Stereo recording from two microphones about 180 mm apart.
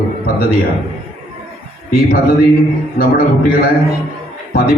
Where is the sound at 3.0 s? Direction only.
55° left (ahead or behind).